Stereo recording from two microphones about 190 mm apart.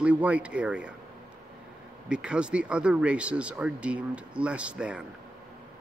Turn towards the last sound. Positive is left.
turn(degrees=-5)  # may be behind; listen again after turning